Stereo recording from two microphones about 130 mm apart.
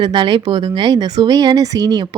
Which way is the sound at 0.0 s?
40° right (ahead or behind).